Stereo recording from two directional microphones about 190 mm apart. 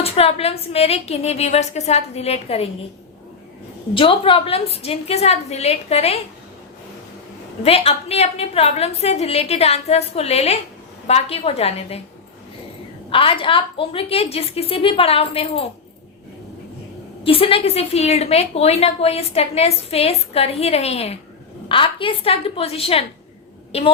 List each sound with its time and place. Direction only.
0.0 s a woman's voice: 30° left (ahead or behind)
3.9 s a woman's voice: 30° left (ahead or behind)
7.6 s a woman's voice: 30° left (ahead or behind)
13.1 s a woman's voice: 30° left (ahead or behind)
17.2 s a woman's voice: 30° left (ahead or behind)